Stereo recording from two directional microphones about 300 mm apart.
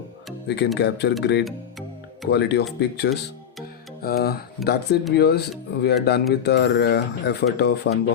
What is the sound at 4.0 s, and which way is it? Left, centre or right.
Speech, left.